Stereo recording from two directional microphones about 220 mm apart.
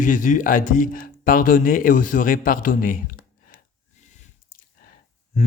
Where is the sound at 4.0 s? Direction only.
35° left (ahead or behind).